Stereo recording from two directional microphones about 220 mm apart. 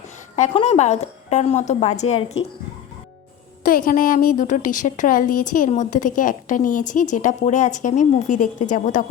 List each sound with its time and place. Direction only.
0.3 s a woman's voice: 30° left (ahead or behind)
3.6 s a woman's voice: 40° left (ahead or behind)